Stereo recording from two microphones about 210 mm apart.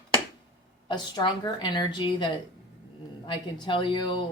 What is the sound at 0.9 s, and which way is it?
Speech, 20° left (ahead or behind).